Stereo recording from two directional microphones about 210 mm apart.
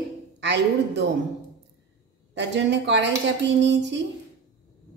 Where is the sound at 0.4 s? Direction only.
55° right (ahead or behind).